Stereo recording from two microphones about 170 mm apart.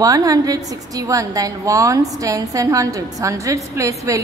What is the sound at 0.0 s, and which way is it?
A woman's voice, 20° right (ahead or behind).